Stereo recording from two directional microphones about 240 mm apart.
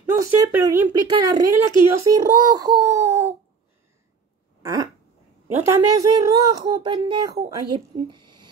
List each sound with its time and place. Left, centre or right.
0.0 s a woman's voice: centre
5.7 s a woman's voice: centre